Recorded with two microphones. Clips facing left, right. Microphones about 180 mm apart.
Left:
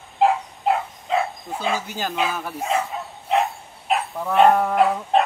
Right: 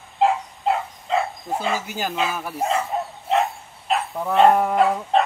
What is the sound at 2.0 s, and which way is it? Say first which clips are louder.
Speech: left 1 dB; centre (ahead or behind).